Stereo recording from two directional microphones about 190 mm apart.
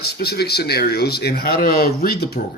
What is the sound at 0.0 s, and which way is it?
Speech, 55° left (ahead or behind).